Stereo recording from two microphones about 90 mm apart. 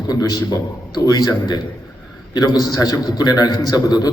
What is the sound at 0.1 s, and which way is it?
A man's voice, 45° left (ahead or behind).